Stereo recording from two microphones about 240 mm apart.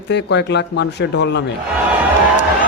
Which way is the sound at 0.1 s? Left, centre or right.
Left.